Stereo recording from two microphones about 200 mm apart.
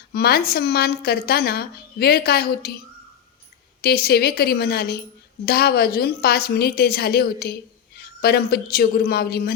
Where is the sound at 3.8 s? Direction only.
50° left (ahead or behind).